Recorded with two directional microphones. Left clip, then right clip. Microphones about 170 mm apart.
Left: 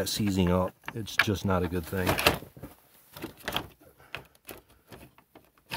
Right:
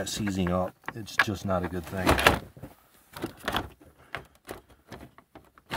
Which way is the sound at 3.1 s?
30° left (ahead or behind).